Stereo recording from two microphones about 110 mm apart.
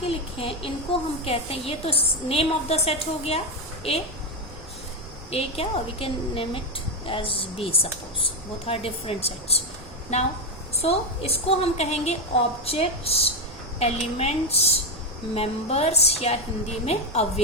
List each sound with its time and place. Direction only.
0.0 s speech: 60° left (ahead or behind)
5.3 s speech: 65° left (ahead or behind)
10.1 s a woman's voice: 80° left
10.8 s a woman's voice: 65° left (ahead or behind)
12.6 s a woman's voice: 65° left (ahead or behind)